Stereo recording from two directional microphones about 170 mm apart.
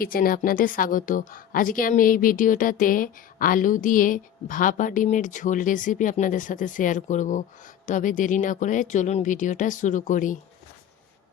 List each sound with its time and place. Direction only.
0.0 s speech: 60° left (ahead or behind)